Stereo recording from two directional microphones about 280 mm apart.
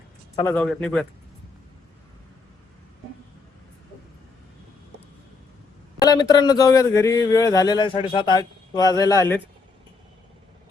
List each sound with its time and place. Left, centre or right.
0.3 s a man's voice: centre
6.0 s speech: centre